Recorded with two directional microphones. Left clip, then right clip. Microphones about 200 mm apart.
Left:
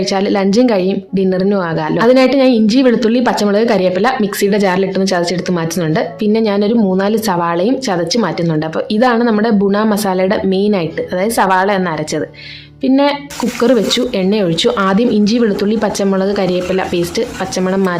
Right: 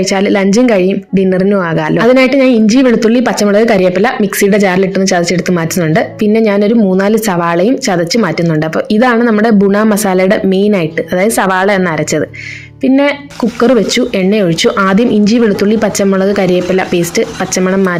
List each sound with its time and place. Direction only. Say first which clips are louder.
0.1 s a woman's voice: right 2 dB; 15° right (ahead or behind)